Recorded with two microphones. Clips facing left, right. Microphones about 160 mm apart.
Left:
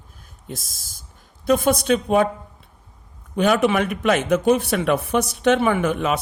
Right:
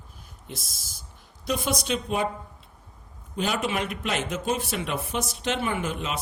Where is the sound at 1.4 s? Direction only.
55° left (ahead or behind).